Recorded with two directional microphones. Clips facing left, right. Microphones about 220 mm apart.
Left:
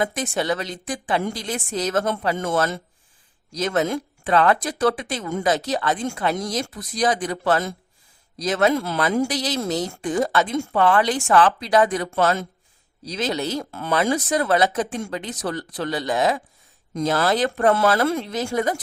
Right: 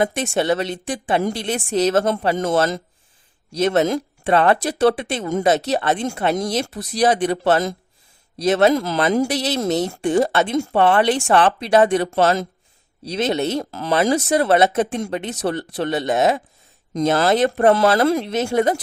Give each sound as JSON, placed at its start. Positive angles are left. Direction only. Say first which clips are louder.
{"t": 0.0, "sound": "speech", "louder": "right 4 dB", "side_deg": -25}
{"t": 3.6, "sound": "speech", "louder": "right 5 dB", "side_deg": -25}